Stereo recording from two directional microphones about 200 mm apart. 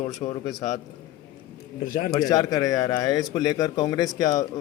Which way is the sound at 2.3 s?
20° left (ahead or behind).